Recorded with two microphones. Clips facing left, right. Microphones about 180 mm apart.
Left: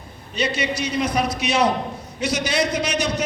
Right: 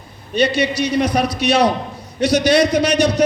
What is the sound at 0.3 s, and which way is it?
A man's voice, 65° right (ahead or behind).